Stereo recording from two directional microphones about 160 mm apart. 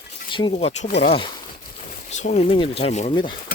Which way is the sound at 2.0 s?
45° left (ahead or behind).